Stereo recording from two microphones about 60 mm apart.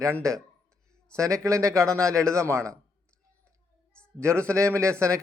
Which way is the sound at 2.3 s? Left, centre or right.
Right.